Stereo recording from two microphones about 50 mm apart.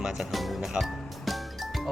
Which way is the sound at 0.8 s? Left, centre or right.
Centre.